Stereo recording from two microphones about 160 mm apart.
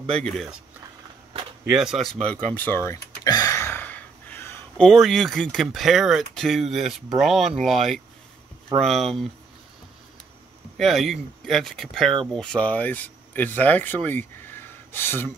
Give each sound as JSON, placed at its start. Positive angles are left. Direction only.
{"t": 0.0, "sound": "speech", "side_deg": -45}
{"t": 1.7, "sound": "a sound", "side_deg": -5}
{"t": 4.8, "sound": "speech", "side_deg": 0}
{"t": 10.8, "sound": "speech", "side_deg": 0}